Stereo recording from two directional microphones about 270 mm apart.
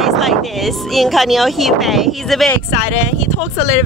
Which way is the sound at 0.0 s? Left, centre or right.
Centre.